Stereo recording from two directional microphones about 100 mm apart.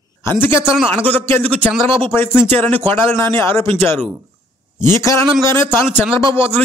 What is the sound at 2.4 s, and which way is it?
A man's voice, 20° left (ahead or behind).